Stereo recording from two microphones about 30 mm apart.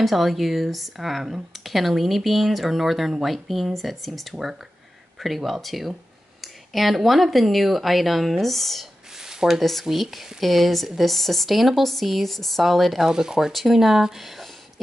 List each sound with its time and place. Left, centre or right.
0.0 s speech: centre
9.2 s a sound: centre
9.6 s speech: centre
9.8 s speech: centre
11.5 s speech: centre
13.0 s speech: centre
13.5 s speech: centre